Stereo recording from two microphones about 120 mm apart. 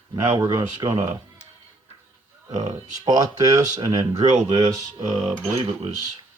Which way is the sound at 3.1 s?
30° right (ahead or behind).